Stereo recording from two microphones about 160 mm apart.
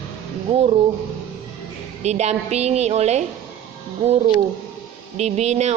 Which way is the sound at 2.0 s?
45° right (ahead or behind).